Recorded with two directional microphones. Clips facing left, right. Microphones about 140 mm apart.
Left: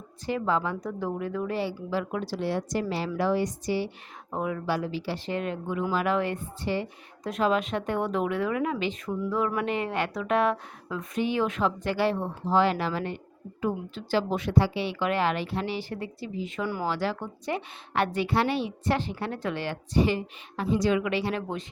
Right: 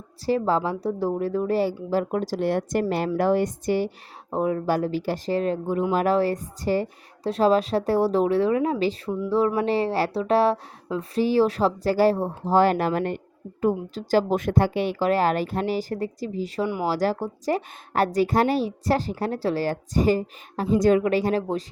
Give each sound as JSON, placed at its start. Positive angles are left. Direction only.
{"t": 0.3, "sound": "a woman's voice", "side_deg": -35}
{"t": 4.3, "sound": "a woman's voice", "side_deg": -35}